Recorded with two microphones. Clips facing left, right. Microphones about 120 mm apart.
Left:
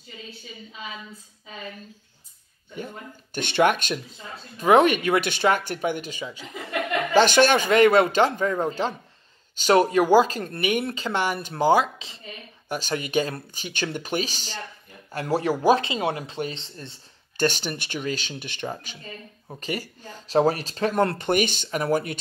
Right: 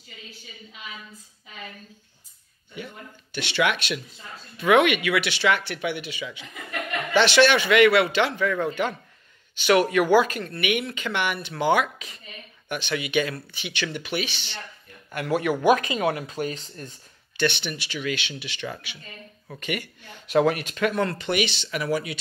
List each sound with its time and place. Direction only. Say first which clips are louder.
3.3 s speech: left 4 dB; 50° left (ahead or behind); by 12.2 s 25° left (ahead or behind)
12.6 s speech: left 1 dB; 40° left (ahead or behind)
17.4 s speech: left 1 dB; 40° left (ahead or behind)
18.0 s speech: right 2 dB; 40° left (ahead or behind)
21.0 s speech: left 3 dB; 50° left (ahead or behind)